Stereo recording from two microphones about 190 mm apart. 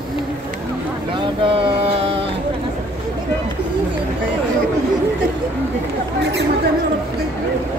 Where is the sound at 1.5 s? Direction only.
30° right (ahead or behind).